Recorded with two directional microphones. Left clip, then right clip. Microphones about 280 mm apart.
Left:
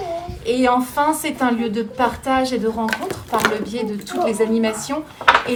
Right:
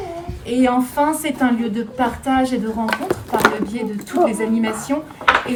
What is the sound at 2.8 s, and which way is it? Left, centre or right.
Speech, centre.